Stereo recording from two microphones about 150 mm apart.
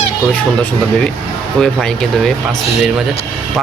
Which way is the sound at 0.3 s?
10° left (ahead or behind).